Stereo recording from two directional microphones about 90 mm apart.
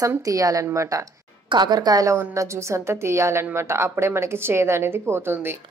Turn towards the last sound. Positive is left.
turn(degrees=-25)  # may be behind; listen again after turning